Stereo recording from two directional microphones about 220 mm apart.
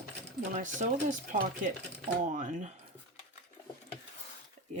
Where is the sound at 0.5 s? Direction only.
35° right (ahead or behind).